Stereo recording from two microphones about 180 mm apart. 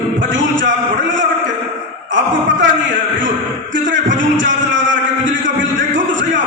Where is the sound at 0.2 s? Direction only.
90° right.